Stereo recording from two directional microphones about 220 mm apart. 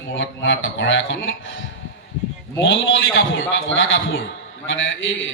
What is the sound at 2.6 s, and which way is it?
A man's voice, 55° left (ahead or behind).